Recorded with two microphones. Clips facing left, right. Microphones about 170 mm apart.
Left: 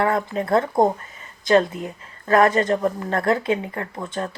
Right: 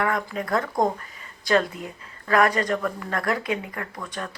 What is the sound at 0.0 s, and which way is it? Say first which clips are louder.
Speech: left 4 dB; 30° left (ahead or behind).